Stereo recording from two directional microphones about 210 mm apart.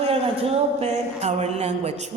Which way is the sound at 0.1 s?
30° right (ahead or behind).